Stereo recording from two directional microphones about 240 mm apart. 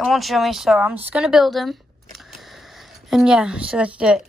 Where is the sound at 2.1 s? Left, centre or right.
Centre.